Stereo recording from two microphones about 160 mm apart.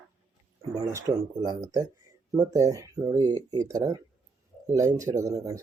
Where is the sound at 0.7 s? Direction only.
20° right (ahead or behind).